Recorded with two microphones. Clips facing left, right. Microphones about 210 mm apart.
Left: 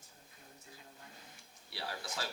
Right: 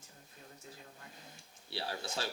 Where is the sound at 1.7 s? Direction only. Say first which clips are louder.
Right 3 dB; 30° right (ahead or behind).